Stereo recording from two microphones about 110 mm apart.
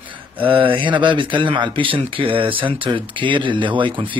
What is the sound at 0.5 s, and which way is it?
Speech, 50° right (ahead or behind).